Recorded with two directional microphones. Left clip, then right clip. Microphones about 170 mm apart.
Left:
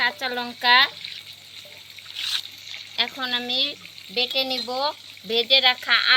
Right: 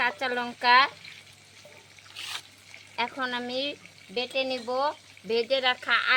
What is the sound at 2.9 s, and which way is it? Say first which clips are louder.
Speech: left 5 dB; 20° right (ahead or behind).